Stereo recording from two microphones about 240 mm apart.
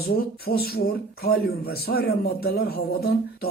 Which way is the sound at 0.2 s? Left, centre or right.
Left.